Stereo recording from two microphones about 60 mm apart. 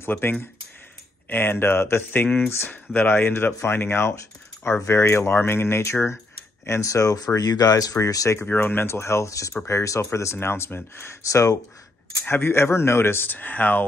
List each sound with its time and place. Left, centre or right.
0.0 s speech: left
6.6 s speech: left
8.5 s speech: left
11.2 s speech: left
12.3 s speech: left